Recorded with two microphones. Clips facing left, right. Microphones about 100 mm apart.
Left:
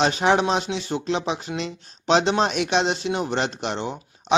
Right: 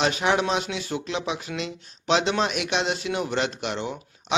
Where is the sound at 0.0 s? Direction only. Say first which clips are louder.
Left 3 dB; 30° left (ahead or behind).